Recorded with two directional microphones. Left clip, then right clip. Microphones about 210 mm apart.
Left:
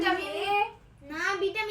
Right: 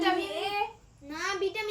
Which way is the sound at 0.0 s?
Centre (ahead or behind).